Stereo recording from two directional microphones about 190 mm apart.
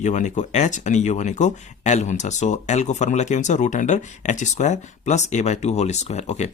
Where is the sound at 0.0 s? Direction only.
40° left (ahead or behind).